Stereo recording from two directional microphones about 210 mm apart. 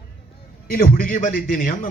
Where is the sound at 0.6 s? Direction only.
40° left (ahead or behind).